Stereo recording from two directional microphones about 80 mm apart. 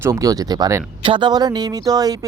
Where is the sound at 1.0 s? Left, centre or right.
Right.